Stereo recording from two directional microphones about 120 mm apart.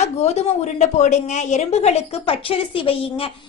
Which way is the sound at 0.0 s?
65° left (ahead or behind).